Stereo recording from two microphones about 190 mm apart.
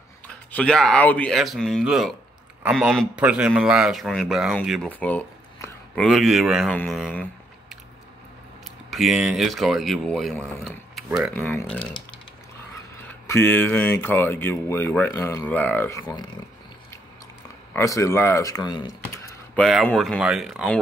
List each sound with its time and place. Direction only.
0.5 s speech: 5° left (ahead or behind)
8.9 s speech: centre (ahead or behind)
11.8 s speech: 25° left (ahead or behind)
13.3 s speech: 10° left (ahead or behind)
17.7 s speech: 15° left (ahead or behind)
19.0 s a sound: 15° left (ahead or behind)
19.5 s speech: centre (ahead or behind)